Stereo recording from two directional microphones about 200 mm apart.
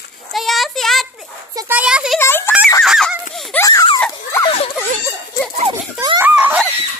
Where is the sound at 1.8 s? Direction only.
5° right (ahead or behind).